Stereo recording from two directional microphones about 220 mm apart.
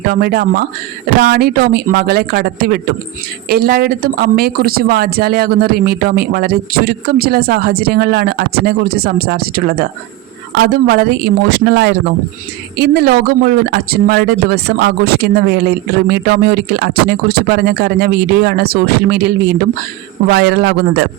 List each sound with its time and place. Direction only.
0.1 s speech: 45° right (ahead or behind)
20.3 s speech: 50° right (ahead or behind)